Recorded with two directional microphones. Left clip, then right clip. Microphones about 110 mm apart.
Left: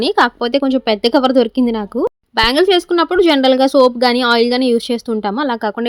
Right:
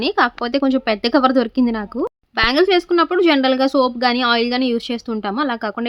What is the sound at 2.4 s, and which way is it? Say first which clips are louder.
A woman's voice: left 3 dB; 40° left (ahead or behind).